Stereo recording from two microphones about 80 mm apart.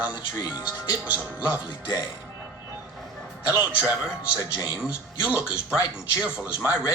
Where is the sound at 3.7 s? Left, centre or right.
Centre.